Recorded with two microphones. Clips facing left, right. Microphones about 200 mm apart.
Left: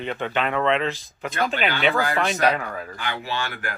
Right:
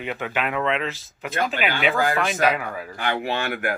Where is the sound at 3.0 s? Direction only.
55° right (ahead or behind).